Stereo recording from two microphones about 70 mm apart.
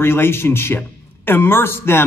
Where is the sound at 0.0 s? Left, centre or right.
Left.